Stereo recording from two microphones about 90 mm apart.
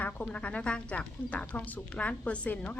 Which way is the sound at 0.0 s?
15° left (ahead or behind).